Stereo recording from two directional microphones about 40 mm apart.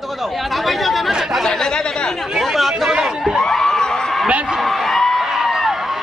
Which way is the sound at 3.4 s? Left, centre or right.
Centre.